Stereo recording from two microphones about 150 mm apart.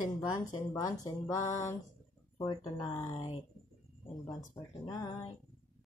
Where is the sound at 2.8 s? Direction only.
25° left (ahead or behind).